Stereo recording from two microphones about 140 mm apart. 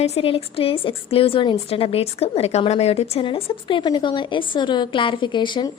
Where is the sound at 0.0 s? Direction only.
45° left (ahead or behind).